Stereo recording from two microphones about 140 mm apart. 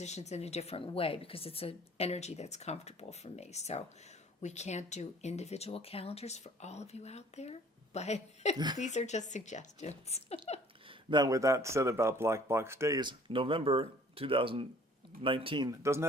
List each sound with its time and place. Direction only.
0.0 s speech: 55° left (ahead or behind)
8.5 s speech: 30° right (ahead or behind)
8.8 s a woman's voice: 55° left (ahead or behind)
10.8 s speech: 30° right (ahead or behind)
13.0 s speech: 35° right (ahead or behind)
15.8 s speech: 20° right (ahead or behind)